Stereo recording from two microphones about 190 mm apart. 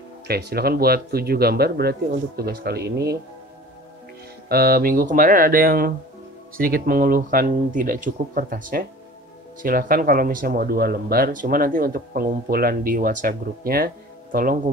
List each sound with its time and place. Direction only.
0.3 s speech: 55° right (ahead or behind)
4.5 s speech: 55° right (ahead or behind)